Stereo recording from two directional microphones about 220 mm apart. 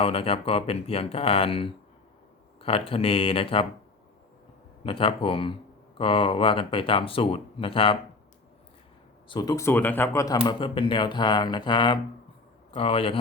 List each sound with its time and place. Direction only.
0.0 s speech: 25° left (ahead or behind)
4.8 s speech: 25° left (ahead or behind)
9.3 s speech: 20° left (ahead or behind)